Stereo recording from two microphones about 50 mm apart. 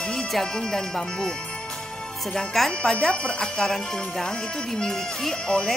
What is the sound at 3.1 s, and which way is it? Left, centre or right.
Speech, centre.